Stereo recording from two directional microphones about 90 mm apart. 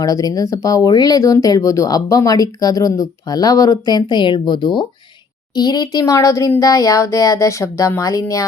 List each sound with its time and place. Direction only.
0.0 s speech: 40° left (ahead or behind); by 4.9 s 60° left (ahead or behind)
5.5 s speech: 50° left (ahead or behind)